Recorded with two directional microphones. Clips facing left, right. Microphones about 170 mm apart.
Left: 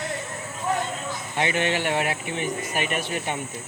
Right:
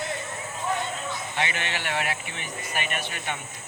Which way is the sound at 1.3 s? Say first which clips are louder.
Left 8 dB; 30° left (ahead or behind).